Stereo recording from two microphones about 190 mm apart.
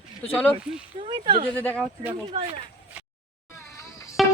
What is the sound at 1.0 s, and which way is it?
Speech, 25° right (ahead or behind).